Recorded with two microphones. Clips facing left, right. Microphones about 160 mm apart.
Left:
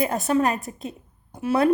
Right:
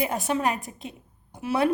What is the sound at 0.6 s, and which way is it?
Speech, 40° left (ahead or behind).